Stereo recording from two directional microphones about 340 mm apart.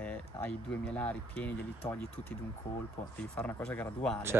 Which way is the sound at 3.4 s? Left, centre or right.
Centre.